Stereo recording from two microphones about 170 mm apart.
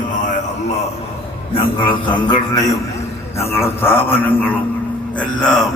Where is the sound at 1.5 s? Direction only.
30° left (ahead or behind).